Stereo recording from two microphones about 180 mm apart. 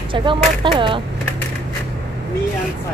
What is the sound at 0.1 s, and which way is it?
Speech, 25° right (ahead or behind).